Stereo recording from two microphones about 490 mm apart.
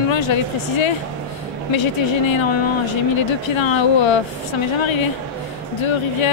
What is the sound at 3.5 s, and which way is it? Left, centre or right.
Speech, left.